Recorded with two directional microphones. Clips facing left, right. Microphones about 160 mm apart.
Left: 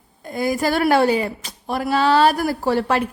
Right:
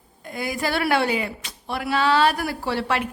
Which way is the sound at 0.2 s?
40° left (ahead or behind).